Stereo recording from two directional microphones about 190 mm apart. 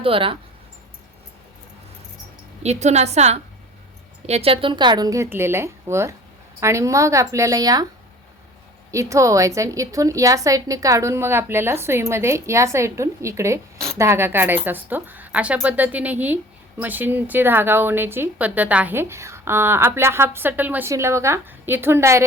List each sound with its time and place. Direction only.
0.0 s speech: 30° right (ahead or behind)
2.6 s a woman's voice: 35° right (ahead or behind); by 7.9 s 20° right (ahead or behind)
8.9 s speech: 15° right (ahead or behind)